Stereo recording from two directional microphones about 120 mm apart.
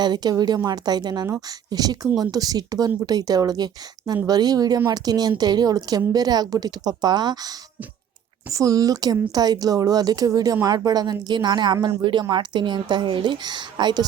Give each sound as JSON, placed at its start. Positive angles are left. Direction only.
{"t": 0.0, "sound": "a woman's voice", "side_deg": -35}